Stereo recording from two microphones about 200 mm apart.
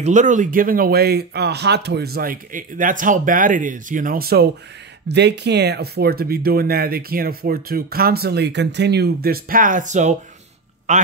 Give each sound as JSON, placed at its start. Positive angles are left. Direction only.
{"t": 0.0, "sound": "a man's voice", "side_deg": -40}